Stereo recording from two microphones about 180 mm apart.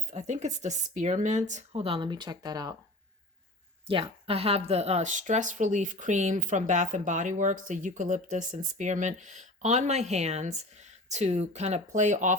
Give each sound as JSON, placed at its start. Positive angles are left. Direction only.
{"t": 0.1, "sound": "speech", "side_deg": -40}
{"t": 3.8, "sound": "speech", "side_deg": -30}